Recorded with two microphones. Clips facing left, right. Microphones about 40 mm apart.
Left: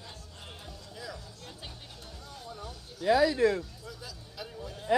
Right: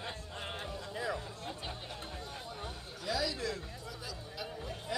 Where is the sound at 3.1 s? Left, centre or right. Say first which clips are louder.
Left 12 dB; left.